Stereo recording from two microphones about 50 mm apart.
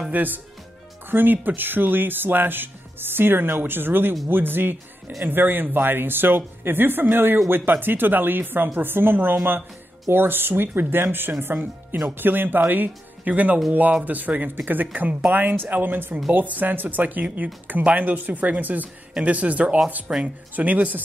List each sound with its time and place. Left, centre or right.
0.1 s speech: right
20.1 s speech: centre
20.5 s speech: right